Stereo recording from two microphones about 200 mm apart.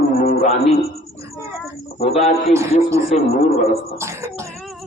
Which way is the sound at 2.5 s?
15° right (ahead or behind).